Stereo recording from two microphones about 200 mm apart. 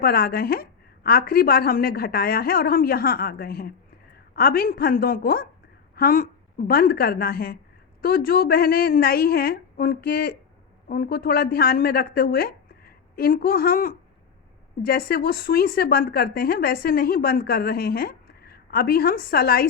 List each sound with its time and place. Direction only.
0.0 s a woman's voice: 50° left (ahead or behind)